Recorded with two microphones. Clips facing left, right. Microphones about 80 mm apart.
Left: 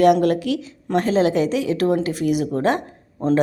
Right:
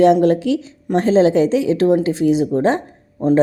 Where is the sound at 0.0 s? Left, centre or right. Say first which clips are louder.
Right 3 dB; right.